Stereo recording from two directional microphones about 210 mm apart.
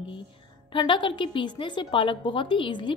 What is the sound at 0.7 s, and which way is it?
A woman's voice, 25° left (ahead or behind).